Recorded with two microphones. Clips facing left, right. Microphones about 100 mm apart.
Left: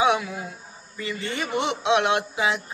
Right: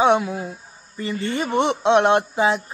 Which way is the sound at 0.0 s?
35° right (ahead or behind).